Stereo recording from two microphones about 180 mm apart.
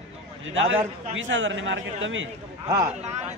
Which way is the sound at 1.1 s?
90° right.